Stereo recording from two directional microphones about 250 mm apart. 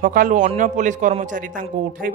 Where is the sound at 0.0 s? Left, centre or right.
Right.